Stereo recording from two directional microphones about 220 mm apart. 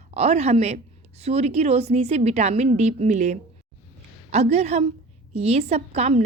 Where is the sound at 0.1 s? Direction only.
30° right (ahead or behind).